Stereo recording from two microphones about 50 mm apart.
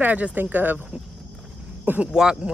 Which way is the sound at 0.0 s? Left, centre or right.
Right.